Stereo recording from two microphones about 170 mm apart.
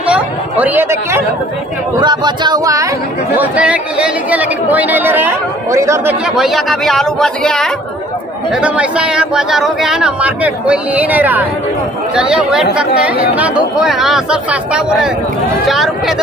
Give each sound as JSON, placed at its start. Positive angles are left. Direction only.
{"t": 0.0, "sound": "chatter", "side_deg": -10}
{"t": 2.0, "sound": "speech", "side_deg": -25}
{"t": 3.3, "sound": "speech", "side_deg": -10}
{"t": 6.2, "sound": "speech", "side_deg": 0}
{"t": 8.5, "sound": "speech", "side_deg": -5}